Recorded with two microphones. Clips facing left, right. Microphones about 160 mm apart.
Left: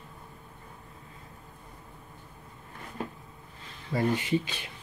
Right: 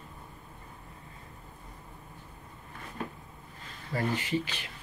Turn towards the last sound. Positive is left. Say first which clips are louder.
# left 3 dB
turn(degrees=20)  # may be behind; listen again after turning